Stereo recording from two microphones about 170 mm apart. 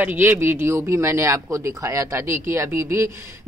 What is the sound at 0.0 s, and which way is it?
Speech, 10° right (ahead or behind).